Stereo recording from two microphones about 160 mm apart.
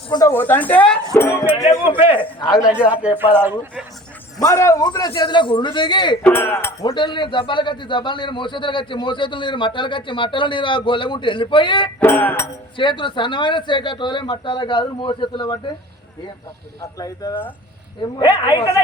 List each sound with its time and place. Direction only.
0.1 s a man's voice: 20° left (ahead or behind)
2.6 s speech: 5° right (ahead or behind)
4.4 s a man's voice: 20° left (ahead or behind)
6.2 s speech: 15° left (ahead or behind)
6.9 s a man's voice: 30° left (ahead or behind)
11.9 s speech: 10° left (ahead or behind)
12.7 s a man's voice: 30° left (ahead or behind)
16.8 s a man's voice: 20° left (ahead or behind)